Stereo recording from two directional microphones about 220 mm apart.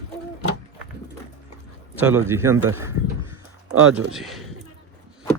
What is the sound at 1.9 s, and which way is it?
A man's voice, 10° right (ahead or behind).